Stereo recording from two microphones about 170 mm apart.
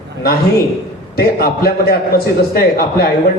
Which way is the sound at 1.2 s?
65° left (ahead or behind).